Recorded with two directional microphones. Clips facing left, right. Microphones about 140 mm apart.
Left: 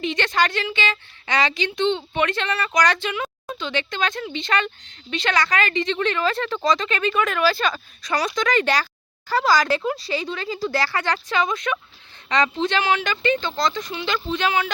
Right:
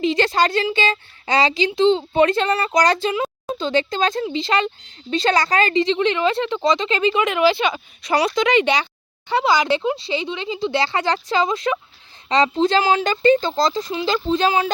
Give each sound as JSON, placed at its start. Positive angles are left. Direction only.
{"t": 0.0, "sound": "a woman's voice", "side_deg": -30}